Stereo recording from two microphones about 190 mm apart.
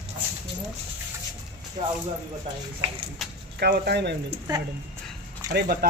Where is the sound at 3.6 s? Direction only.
55° right (ahead or behind).